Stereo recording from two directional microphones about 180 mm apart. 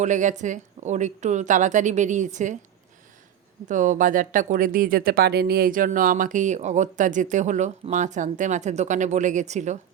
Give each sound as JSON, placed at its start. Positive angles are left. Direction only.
{"t": 0.0, "sound": "speech", "side_deg": -45}
{"t": 3.7, "sound": "speech", "side_deg": -45}